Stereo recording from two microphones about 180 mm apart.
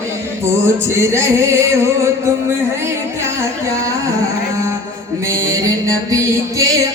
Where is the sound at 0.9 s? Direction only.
15° right (ahead or behind).